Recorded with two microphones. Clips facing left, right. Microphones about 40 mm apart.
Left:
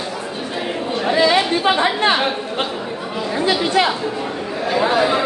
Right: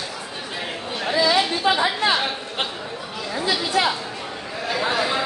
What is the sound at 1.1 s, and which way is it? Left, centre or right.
Chatter, left.